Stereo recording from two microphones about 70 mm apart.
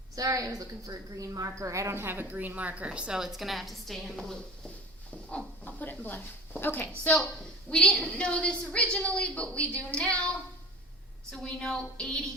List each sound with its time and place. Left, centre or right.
0.2 s a woman's voice: right; by 4.4 s centre
5.3 s a sound: left
6.6 s a woman's voice: left
7.7 s a woman's voice: centre
11.3 s a woman's voice: centre